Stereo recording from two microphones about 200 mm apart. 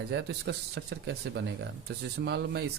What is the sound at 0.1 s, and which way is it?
Speech, 60° right (ahead or behind).